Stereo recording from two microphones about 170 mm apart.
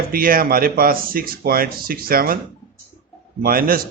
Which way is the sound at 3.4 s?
60° right (ahead or behind).